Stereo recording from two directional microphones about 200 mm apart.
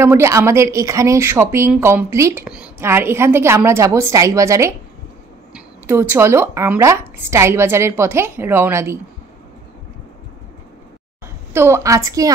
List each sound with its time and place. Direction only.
0.0 s a woman's voice: 15° right (ahead or behind)
11.5 s a woman's voice: 15° right (ahead or behind)